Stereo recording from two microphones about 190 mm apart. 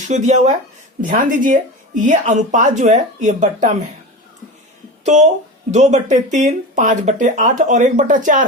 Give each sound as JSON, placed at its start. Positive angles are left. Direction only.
{"t": 0.1, "sound": "speech", "side_deg": -40}
{"t": 5.1, "sound": "speech", "side_deg": -35}